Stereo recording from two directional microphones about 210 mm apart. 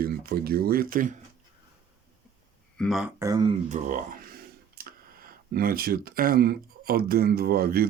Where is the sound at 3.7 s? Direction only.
35° right (ahead or behind).